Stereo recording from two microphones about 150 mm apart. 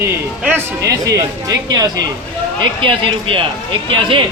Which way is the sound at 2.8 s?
35° right (ahead or behind).